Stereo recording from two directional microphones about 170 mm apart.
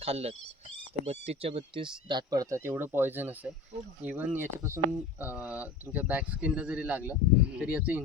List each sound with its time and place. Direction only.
0.0 s speech: 35° right (ahead or behind); by 8.0 s 10° right (ahead or behind)